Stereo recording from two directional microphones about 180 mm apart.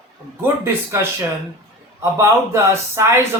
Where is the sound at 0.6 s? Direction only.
15° right (ahead or behind).